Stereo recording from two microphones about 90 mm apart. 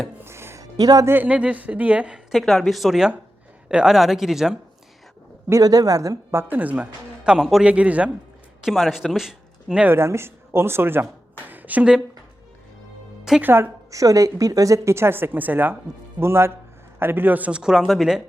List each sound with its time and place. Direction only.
0.3 s music: 30° right (ahead or behind)
0.6 s music: 45° right (ahead or behind)
1.0 s speech: 20° right (ahead or behind); by 4.5 s 5° right (ahead or behind)
5.5 s speech: 40° right (ahead or behind)
6.3 s speech: 20° right (ahead or behind)
8.6 s speech: centre (ahead or behind)
9.9 s a woman's voice: 30° right (ahead or behind); by 12.0 s 10° right (ahead or behind)
13.4 s speech: 25° right (ahead or behind)
13.9 s speech: 40° right (ahead or behind); by 18.2 s 5° right (ahead or behind)